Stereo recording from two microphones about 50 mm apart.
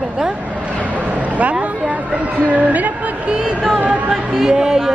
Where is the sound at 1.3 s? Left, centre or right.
Right.